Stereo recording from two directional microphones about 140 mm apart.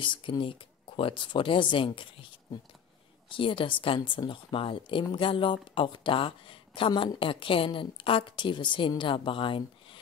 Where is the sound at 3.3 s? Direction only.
40° left (ahead or behind).